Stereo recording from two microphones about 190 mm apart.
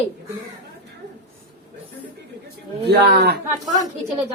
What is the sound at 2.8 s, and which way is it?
Speech, 60° right (ahead or behind).